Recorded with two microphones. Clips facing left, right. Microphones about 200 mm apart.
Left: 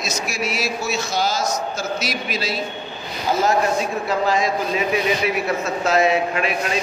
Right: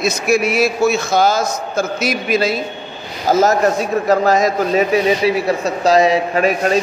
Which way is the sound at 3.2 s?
40° right (ahead or behind).